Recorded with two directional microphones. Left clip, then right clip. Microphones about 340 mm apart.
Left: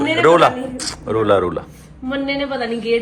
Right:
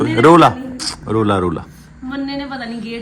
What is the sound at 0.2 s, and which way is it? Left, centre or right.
A man's voice, centre.